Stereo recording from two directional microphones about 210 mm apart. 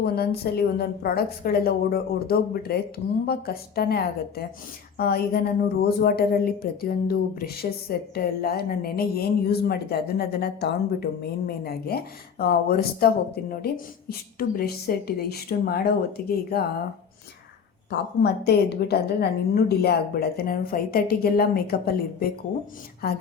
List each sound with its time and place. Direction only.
0.0 s a woman's voice: 50° left (ahead or behind)
18.2 s a woman's voice: 50° left (ahead or behind)